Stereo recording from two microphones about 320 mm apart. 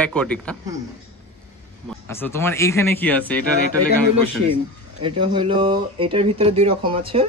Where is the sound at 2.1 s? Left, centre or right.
Centre.